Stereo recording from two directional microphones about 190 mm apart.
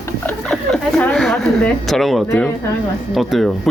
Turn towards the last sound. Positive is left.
turn(degrees=0)  # may be behind; listen again after turning